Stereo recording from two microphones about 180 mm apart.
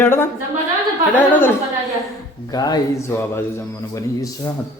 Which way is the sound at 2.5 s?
20° left (ahead or behind).